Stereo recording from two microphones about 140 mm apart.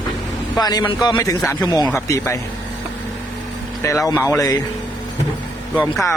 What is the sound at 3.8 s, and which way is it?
Speech, 20° left (ahead or behind).